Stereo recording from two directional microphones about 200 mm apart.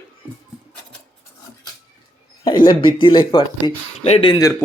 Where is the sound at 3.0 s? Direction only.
25° left (ahead or behind).